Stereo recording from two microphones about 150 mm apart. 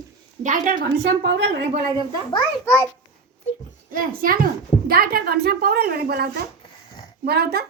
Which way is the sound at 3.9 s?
70° right (ahead or behind).